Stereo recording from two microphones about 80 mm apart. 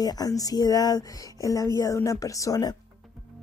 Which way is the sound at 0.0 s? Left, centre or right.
Left.